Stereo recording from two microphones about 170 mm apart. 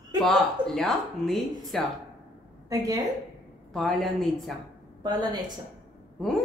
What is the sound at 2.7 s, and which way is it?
Speech, 20° right (ahead or behind).